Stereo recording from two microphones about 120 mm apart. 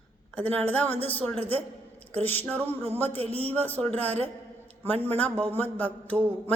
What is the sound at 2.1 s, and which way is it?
Mantra, 15° left (ahead or behind).